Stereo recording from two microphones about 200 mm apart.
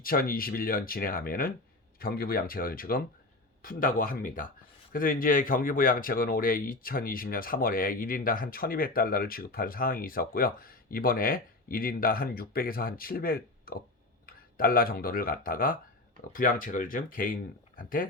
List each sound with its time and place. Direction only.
0.0 s speech: 45° left (ahead or behind)